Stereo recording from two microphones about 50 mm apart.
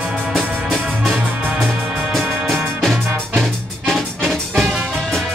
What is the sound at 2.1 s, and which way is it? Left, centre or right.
Music, centre.